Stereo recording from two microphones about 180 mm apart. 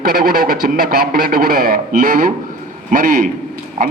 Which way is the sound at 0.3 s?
55° right (ahead or behind).